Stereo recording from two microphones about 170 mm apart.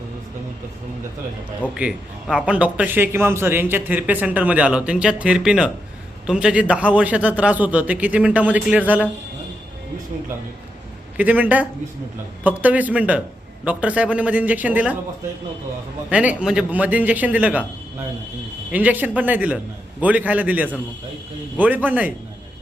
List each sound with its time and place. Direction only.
1.7 s a man's voice: 5° right (ahead or behind)
11.2 s a man's voice: 10° right (ahead or behind)
16.0 s a man's voice: 5° right (ahead or behind)
18.7 s a man's voice: 10° right (ahead or behind)